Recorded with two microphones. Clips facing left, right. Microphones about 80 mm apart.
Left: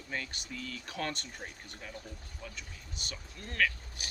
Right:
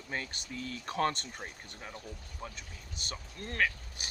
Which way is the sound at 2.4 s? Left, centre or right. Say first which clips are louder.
Right 2 dB; right.